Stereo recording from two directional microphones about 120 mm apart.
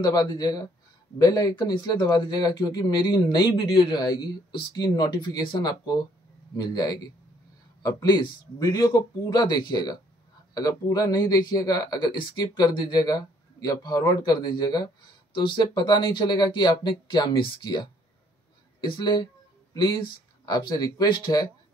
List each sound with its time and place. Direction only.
0.0 s speech: 35° left (ahead or behind)